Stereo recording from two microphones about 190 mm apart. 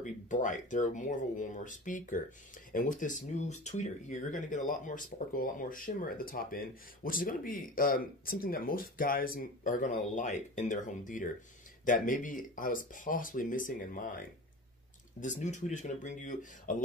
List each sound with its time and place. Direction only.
0.0 s speech: 40° left (ahead or behind)